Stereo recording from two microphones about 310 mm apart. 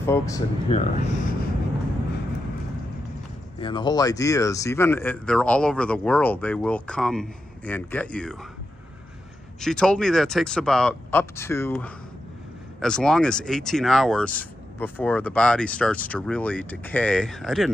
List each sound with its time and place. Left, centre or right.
0.0 s speech: centre
3.5 s speech: centre
9.6 s speech: centre